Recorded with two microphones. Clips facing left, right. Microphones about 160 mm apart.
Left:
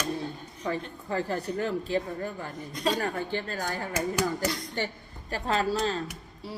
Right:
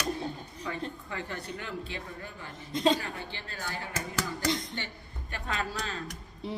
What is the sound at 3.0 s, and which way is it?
A man's voice, 45° left (ahead or behind).